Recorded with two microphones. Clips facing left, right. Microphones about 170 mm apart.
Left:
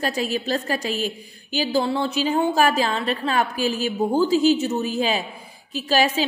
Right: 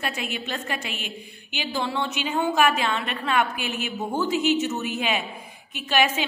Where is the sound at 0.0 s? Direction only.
35° left (ahead or behind).